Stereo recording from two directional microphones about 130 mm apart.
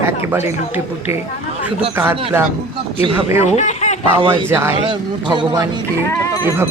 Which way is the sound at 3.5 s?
60° left (ahead or behind).